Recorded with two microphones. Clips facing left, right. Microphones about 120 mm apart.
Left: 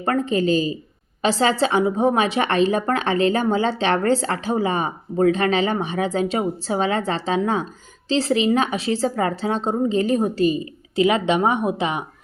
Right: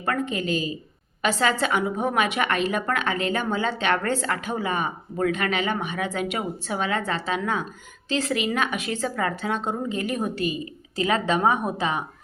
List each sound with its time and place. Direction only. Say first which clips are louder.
0.0 s a woman's voice: left 6 dB; 35° left (ahead or behind)
11.0 s a woman's voice: left 4 dB; 20° left (ahead or behind)